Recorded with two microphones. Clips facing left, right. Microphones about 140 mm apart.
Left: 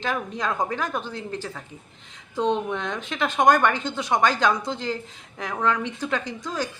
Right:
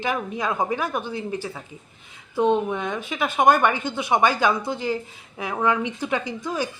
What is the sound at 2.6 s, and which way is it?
Speech, 10° right (ahead or behind).